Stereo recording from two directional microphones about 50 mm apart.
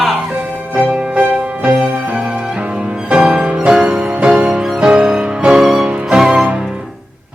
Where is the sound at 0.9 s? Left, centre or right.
Right.